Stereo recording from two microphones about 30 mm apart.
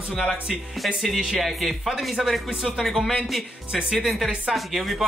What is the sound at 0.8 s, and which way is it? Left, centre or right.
Speech, centre.